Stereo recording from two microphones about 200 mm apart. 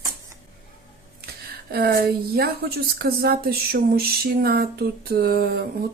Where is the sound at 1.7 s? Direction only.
50° right (ahead or behind).